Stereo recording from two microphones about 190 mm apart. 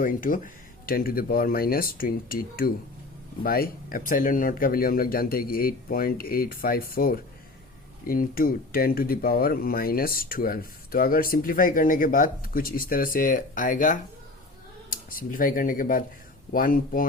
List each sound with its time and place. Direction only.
0.0 s speech: 45° left (ahead or behind)